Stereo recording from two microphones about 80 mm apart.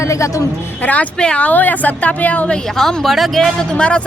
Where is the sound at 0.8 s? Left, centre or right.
Centre.